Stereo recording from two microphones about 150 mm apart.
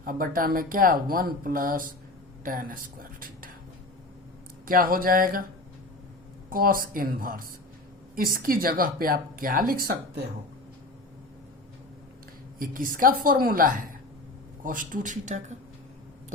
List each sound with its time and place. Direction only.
0.0 s speech: 70° right (ahead or behind)
2.4 s a sound: 65° right (ahead or behind)
4.6 s speech: 70° right (ahead or behind)
6.5 s speech: 70° right (ahead or behind)
12.5 s speech: 65° right (ahead or behind)